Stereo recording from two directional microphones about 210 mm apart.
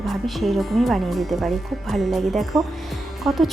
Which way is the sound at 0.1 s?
Centre (ahead or behind).